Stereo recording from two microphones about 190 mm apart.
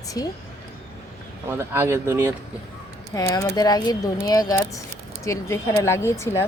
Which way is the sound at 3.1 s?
20° left (ahead or behind).